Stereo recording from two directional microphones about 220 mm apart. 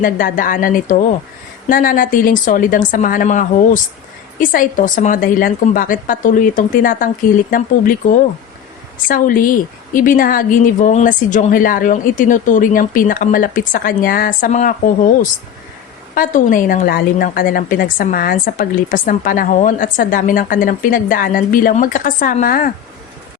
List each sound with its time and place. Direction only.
0.0 s a woman's voice: 40° left (ahead or behind)